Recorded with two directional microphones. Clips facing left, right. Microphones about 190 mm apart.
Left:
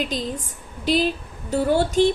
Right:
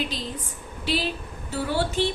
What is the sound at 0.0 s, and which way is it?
Speech, 45° left (ahead or behind).